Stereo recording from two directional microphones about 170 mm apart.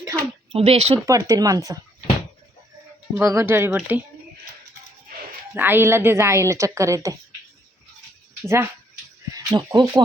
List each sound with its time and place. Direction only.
0.5 s speech: 35° right (ahead or behind)
1.0 s speech: 20° right (ahead or behind)
3.2 s a woman's voice: 15° right (ahead or behind)
5.5 s a woman's voice: 10° right (ahead or behind)
8.4 s a woman's voice: 15° right (ahead or behind)